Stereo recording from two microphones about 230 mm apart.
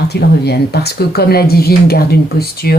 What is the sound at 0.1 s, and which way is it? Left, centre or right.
Speech, left.